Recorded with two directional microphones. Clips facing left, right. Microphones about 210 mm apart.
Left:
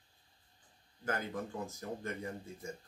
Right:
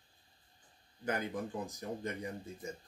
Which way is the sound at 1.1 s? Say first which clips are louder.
Right 1 dB; 15° right (ahead or behind).